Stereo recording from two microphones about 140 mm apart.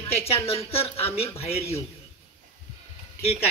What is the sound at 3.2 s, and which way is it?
Speech, 15° left (ahead or behind).